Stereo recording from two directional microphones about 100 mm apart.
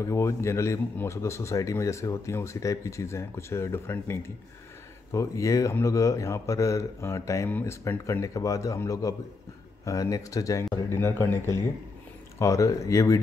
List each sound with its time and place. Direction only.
0.0 s a man's voice: 30° left (ahead or behind)
11.0 s a man's voice: 25° left (ahead or behind)